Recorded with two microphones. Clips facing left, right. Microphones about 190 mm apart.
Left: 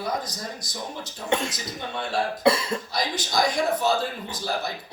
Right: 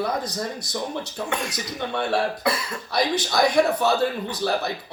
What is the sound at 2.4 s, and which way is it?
Cough, 25° left (ahead or behind).